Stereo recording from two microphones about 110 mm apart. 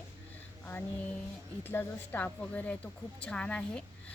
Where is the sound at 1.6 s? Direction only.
20° left (ahead or behind).